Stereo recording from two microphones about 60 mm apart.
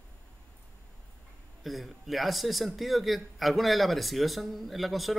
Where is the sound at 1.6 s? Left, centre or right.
Centre.